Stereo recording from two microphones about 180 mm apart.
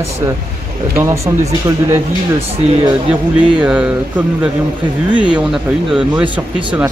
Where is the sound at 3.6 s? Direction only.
10° right (ahead or behind).